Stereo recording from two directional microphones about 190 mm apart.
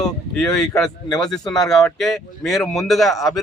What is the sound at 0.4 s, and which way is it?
Speech, 5° left (ahead or behind).